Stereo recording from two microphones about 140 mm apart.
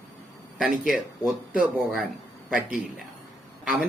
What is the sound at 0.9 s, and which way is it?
Speech, 5° right (ahead or behind).